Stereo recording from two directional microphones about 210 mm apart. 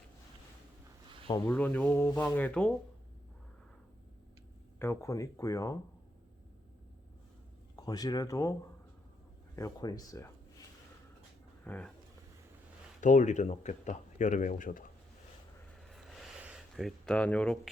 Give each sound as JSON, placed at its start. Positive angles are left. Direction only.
{"t": 1.0, "sound": "a sound", "side_deg": -25}
{"t": 1.5, "sound": "speech", "side_deg": 10}
{"t": 4.8, "sound": "speech", "side_deg": 10}
{"t": 7.8, "sound": "speech", "side_deg": 20}
{"t": 9.6, "sound": "speech", "side_deg": 15}
{"t": 11.6, "sound": "speech", "side_deg": 5}
{"t": 13.0, "sound": "speech", "side_deg": 35}
{"t": 15.8, "sound": "a sound", "side_deg": 0}